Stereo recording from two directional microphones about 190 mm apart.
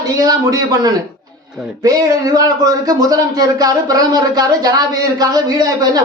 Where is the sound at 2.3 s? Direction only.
20° right (ahead or behind).